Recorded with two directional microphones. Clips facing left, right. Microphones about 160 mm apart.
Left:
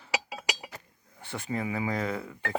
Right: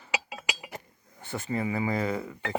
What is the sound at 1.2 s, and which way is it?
Speech, centre (ahead or behind).